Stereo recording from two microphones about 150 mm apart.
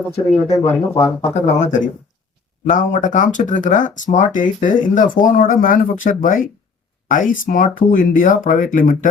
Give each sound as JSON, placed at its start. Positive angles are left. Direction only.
{"t": 0.7, "sound": "speech", "side_deg": 15}
{"t": 1.3, "sound": "speech", "side_deg": 50}